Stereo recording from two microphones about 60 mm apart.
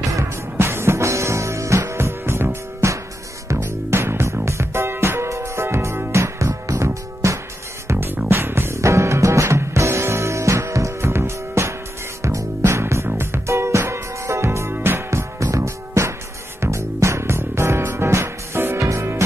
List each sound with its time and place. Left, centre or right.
0.6 s music: right
7.9 s music: right
18.8 s music: right